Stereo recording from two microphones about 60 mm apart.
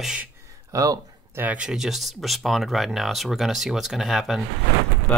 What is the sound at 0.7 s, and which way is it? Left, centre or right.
Speech, right.